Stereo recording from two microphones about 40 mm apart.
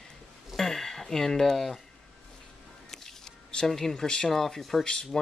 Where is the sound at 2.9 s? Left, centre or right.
Centre.